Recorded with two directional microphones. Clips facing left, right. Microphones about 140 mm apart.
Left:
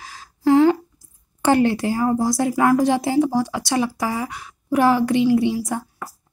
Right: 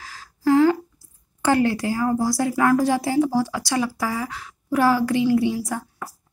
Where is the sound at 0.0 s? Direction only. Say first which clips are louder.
Left 2 dB; 20° left (ahead or behind).